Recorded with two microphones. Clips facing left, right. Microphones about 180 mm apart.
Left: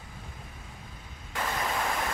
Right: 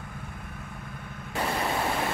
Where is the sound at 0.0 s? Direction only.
60° right (ahead or behind).